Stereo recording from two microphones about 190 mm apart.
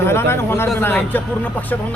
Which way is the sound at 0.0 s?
10° left (ahead or behind).